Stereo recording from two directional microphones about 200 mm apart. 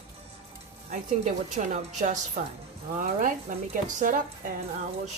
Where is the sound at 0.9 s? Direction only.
35° right (ahead or behind).